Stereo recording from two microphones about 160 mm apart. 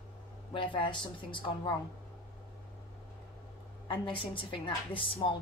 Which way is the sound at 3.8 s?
30° left (ahead or behind).